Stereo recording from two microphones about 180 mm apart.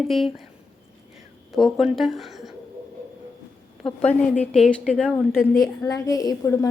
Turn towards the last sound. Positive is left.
turn(degrees=20)  # may be behind; listen again after turning